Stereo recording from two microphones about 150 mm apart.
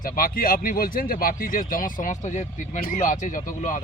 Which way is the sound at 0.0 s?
65° left (ahead or behind).